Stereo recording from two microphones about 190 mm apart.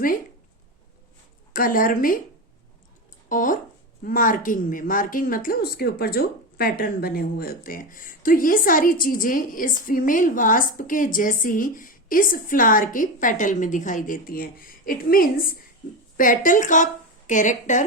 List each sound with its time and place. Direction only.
1.5 s a woman's voice: 50° left (ahead or behind)
3.2 s a woman's voice: 45° left (ahead or behind)